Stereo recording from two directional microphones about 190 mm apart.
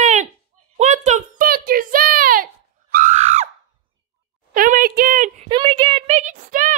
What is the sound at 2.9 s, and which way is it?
Screaming, 40° right (ahead or behind).